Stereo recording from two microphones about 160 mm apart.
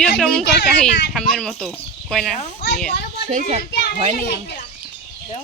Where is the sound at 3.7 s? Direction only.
90° left.